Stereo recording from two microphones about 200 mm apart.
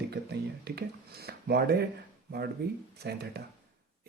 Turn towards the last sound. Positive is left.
turn(degrees=-55)  # may be behind; listen again after turning